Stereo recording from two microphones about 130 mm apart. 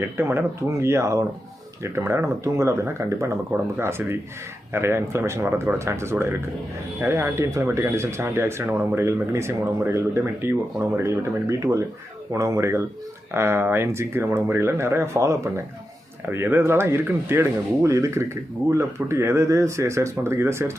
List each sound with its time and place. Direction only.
0.0 s speech: 20° right (ahead or behind)